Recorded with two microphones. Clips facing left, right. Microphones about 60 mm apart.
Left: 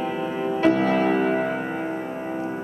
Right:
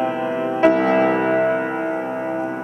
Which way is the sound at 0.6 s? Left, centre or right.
Right.